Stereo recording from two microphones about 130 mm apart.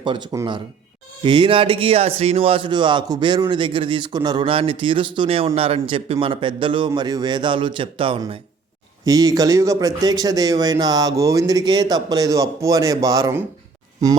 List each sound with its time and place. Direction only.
0.0 s a man's voice: 40° right (ahead or behind)
9.0 s speech: 30° right (ahead or behind)